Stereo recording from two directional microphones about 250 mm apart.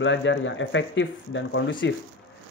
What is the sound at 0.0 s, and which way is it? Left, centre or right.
Speech, left.